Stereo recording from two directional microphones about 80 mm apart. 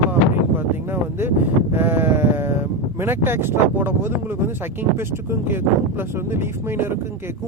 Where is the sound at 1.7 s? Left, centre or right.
Right.